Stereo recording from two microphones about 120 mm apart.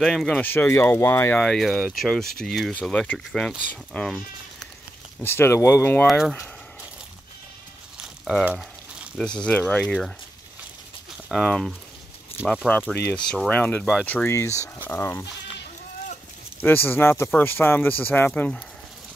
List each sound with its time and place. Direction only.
0.0 s speech: 5° left (ahead or behind)
0.4 s speech: 15° left (ahead or behind)
1.4 s speech: 5° left (ahead or behind)
5.2 s speech: 20° left (ahead or behind)
6.0 s speech: 5° right (ahead or behind)
8.0 s a sound: 5° right (ahead or behind)
8.5 s frying: 5° right (ahead or behind)
9.2 s speech: 10° left (ahead or behind)
11.2 s speech: 5° left (ahead or behind)
12.9 s speech: 10° left (ahead or behind)
14.3 s speech: 25° left (ahead or behind)
16.6 s speech: 15° left (ahead or behind)